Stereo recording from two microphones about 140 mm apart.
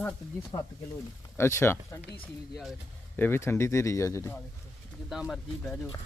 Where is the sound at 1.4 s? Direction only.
15° left (ahead or behind).